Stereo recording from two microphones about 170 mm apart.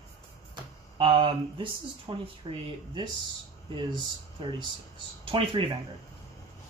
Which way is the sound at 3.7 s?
30° right (ahead or behind).